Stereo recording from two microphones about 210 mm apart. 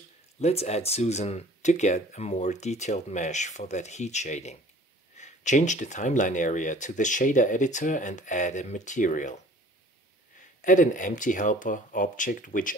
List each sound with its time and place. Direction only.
0.4 s speech: 30° left (ahead or behind)
10.6 s speech: 35° left (ahead or behind)